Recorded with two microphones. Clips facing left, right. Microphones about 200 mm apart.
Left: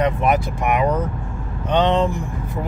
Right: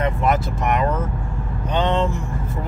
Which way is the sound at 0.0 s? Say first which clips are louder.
Left 2 dB; 15° left (ahead or behind).